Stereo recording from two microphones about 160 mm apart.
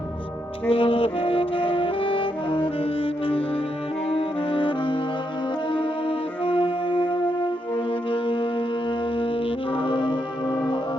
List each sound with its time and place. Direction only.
0.7 s brass instrument: 35° left (ahead or behind)
4.1 s saxophone: 35° left (ahead or behind)
5.7 s music: 35° left (ahead or behind)
9.7 s music: 30° left (ahead or behind)